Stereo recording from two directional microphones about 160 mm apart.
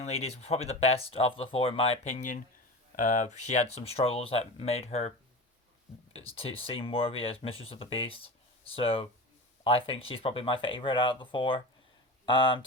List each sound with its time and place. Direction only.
0.0 s speech: 40° left (ahead or behind)
6.3 s speech: 35° left (ahead or behind)